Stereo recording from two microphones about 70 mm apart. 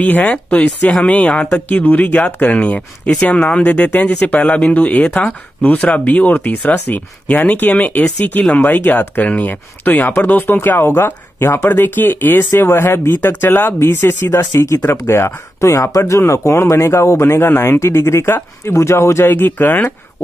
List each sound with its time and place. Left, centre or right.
0.0 s speech: left